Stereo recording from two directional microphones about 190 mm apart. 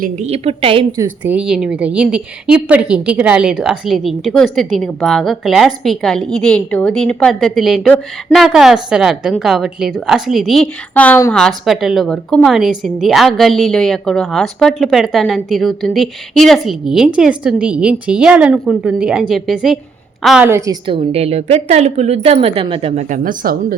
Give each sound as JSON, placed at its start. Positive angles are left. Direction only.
{"t": 0.0, "sound": "a woman's voice", "side_deg": -35}
{"t": 0.9, "sound": "a woman's voice", "side_deg": -10}